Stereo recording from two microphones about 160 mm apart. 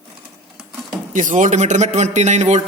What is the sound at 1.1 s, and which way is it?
Speech, 55° right (ahead or behind).